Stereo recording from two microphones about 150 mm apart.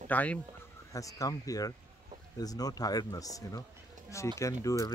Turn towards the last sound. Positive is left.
turn(degrees=20)  # may be behind; listen again after turning